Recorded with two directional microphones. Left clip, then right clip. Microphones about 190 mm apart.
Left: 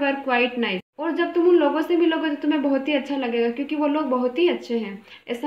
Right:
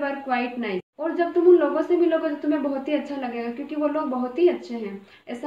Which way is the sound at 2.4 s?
50° left (ahead or behind).